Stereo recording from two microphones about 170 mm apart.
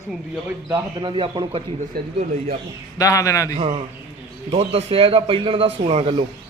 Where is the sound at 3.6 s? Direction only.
35° right (ahead or behind).